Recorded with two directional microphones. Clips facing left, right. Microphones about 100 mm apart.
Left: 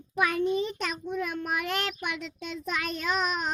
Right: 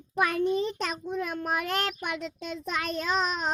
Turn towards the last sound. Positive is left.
turn(degrees=-35)  # may be behind; listen again after turning